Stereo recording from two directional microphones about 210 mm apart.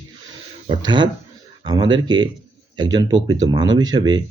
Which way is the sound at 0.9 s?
20° right (ahead or behind).